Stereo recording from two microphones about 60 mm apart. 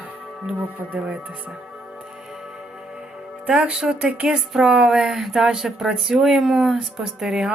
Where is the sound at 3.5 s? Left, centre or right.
Centre.